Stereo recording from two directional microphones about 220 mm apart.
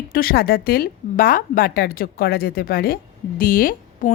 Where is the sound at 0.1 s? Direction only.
40° left (ahead or behind).